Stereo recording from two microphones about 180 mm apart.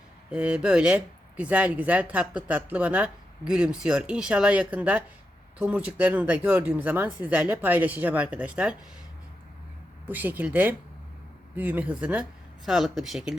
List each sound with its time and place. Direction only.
0.3 s speech: 5° right (ahead or behind)
10.1 s speech: 10° right (ahead or behind)